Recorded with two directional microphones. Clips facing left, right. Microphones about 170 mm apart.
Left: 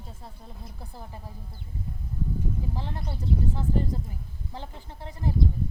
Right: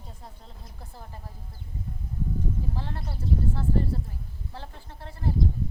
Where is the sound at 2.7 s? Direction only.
15° left (ahead or behind).